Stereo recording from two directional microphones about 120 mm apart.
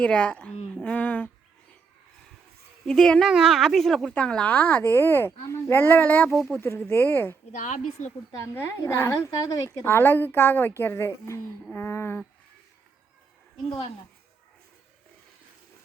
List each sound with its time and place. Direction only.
0.0 s a child's voice: 10° left (ahead or behind)
2.8 s a child's voice: 5° left (ahead or behind)
6.3 s speech: centre (ahead or behind)
6.6 s a child's voice: 20° left (ahead or behind)
7.5 s a woman's voice: 90° left
8.5 s a woman's voice: 25° left (ahead or behind)
9.8 s a woman's voice: 20° left (ahead or behind)